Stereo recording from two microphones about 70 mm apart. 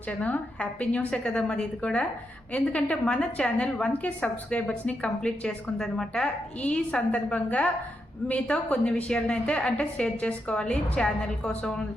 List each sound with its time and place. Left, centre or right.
0.2 s a woman's voice: centre